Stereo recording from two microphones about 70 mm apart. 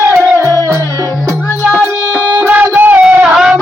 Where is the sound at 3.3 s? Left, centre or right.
Centre.